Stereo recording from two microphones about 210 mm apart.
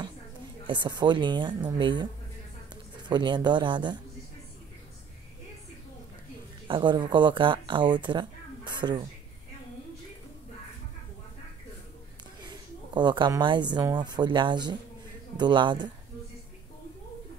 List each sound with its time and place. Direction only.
0.7 s speech: 20° right (ahead or behind)
3.1 s speech: 20° right (ahead or behind)
6.7 s speech: 20° right (ahead or behind)
12.4 s a woman's voice: 20° right (ahead or behind)